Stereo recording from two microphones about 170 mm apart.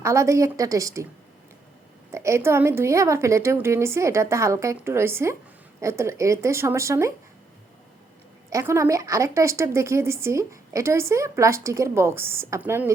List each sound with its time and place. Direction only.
0.0 s a woman's voice: 15° right (ahead or behind)
2.1 s a woman's voice: 15° right (ahead or behind)
8.4 s a woman's voice: 15° right (ahead or behind)